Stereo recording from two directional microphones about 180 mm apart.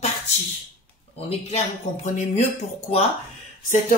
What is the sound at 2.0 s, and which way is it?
Speech, 40° left (ahead or behind).